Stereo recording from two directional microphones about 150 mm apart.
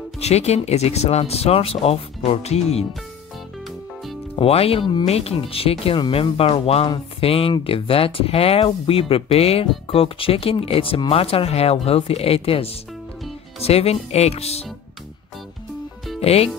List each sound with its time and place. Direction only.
0.2 s speech: 45° left (ahead or behind)
4.4 s speech: 40° left (ahead or behind)
16.2 s speech: 40° left (ahead or behind)